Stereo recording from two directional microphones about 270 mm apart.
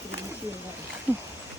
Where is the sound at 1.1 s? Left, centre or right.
Centre.